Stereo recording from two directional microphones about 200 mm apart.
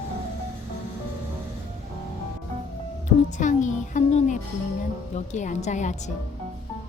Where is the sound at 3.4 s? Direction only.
40° left (ahead or behind).